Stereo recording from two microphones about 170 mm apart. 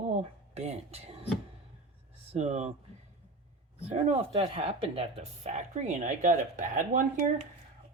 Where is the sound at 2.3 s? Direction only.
40° right (ahead or behind).